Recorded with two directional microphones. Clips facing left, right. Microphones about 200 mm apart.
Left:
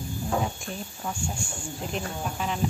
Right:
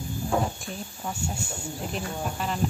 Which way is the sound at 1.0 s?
5° right (ahead or behind).